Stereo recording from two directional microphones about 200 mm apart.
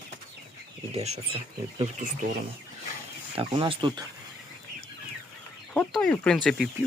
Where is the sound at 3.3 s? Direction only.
25° right (ahead or behind).